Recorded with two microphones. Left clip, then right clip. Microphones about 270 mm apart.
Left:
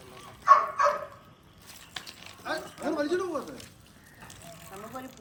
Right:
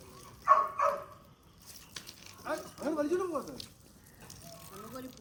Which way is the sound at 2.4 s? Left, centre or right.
Centre.